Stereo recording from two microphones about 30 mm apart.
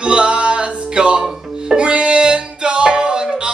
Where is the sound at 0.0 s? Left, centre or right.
Right.